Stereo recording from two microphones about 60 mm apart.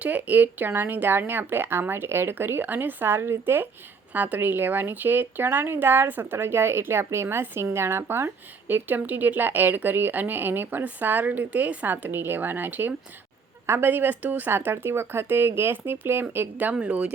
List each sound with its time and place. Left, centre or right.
0.0 s speech: right
14.5 s speech: right